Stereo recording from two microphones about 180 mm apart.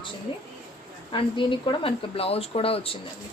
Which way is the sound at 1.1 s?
25° left (ahead or behind).